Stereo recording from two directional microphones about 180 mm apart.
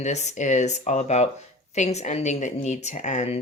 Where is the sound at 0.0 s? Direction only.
40° left (ahead or behind).